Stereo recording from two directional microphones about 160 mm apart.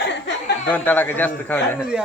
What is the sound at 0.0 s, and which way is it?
Chuckle, 90° left.